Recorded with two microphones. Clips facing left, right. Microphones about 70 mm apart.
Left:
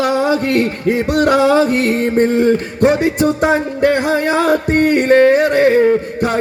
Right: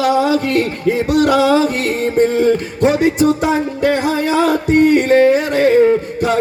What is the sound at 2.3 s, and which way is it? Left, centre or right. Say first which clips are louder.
A man's voice: left 1 dB; left.